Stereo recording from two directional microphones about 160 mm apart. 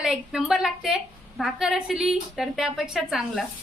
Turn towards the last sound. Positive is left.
turn(degrees=0)  # may be behind; listen again after turning